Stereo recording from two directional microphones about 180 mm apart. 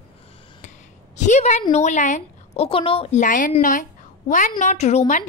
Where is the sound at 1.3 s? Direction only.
40° left (ahead or behind).